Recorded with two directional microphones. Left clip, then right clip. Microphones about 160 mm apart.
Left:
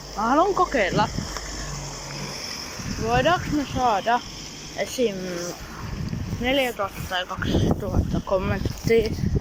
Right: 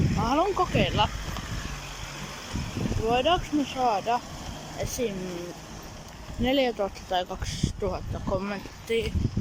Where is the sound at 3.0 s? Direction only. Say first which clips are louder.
Left 3 dB; 15° right (ahead or behind).